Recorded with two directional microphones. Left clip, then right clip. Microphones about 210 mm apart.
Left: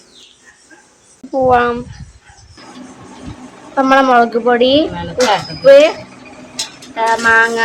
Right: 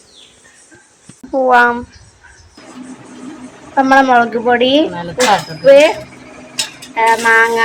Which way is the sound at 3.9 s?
5° left (ahead or behind).